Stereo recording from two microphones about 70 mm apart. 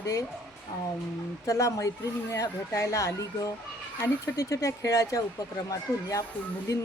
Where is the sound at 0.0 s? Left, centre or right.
Left.